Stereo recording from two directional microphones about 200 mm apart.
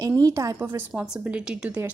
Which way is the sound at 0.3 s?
15° right (ahead or behind).